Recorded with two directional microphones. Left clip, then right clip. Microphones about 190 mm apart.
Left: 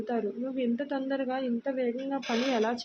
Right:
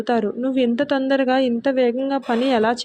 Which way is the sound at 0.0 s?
35° right (ahead or behind).